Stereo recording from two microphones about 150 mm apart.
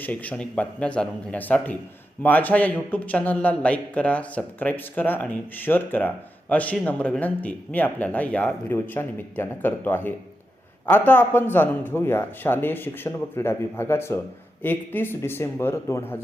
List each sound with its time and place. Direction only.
0.0 s a man's voice: 10° left (ahead or behind)